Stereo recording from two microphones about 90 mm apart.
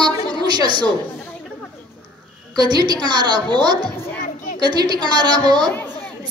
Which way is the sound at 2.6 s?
50° right (ahead or behind).